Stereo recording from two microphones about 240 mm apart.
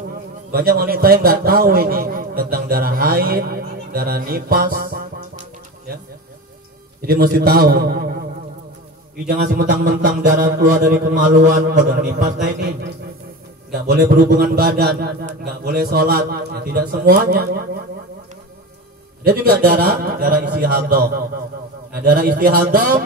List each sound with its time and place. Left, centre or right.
0.5 s a man's voice: right
7.0 s a man's voice: right
9.3 s a man's voice: right
19.2 s a man's voice: right
22.0 s a man's voice: right